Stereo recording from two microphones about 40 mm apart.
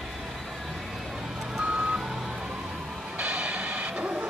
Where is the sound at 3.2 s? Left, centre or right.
Right.